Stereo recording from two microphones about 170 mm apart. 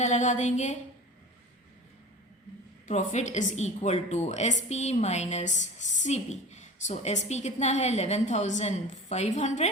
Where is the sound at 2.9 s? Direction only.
45° left (ahead or behind).